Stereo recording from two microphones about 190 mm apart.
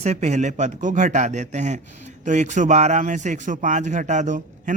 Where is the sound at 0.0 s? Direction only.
35° right (ahead or behind).